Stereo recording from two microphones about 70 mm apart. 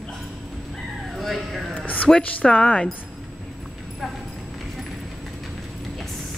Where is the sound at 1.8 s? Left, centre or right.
Left.